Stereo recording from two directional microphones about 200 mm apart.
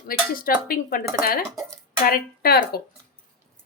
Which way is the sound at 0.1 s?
45° left (ahead or behind).